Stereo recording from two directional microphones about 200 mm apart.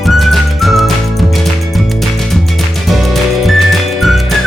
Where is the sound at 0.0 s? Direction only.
Centre (ahead or behind).